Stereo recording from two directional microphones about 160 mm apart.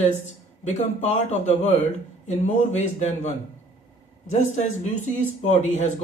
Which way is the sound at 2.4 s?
50° left (ahead or behind).